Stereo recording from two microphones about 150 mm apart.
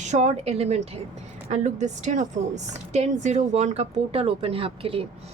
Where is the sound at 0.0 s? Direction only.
50° right (ahead or behind).